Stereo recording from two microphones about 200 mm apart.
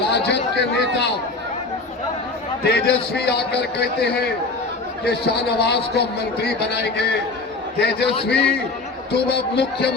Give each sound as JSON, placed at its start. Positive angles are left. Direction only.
{"t": 0.3, "sound": "a man's voice", "side_deg": 60}
{"t": 2.6, "sound": "a man's voice", "side_deg": 55}
{"t": 8.0, "sound": "a man's voice", "side_deg": 25}
{"t": 8.3, "sound": "a man's voice", "side_deg": 55}